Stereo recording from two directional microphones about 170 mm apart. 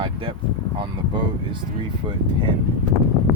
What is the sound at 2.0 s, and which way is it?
Speech, 25° right (ahead or behind).